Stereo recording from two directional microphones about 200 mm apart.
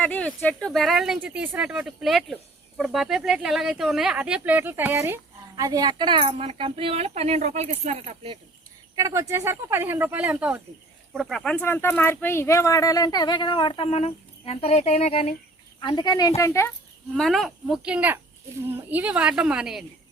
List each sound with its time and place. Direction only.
0.0 s speech: 5° left (ahead or behind); by 8.4 s 30° right (ahead or behind)
9.0 s speech: 15° right (ahead or behind); by 16.7 s 15° left (ahead or behind)
17.2 s a woman's voice: centre (ahead or behind)